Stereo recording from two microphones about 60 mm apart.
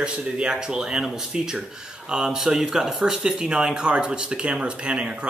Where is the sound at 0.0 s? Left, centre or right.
Centre.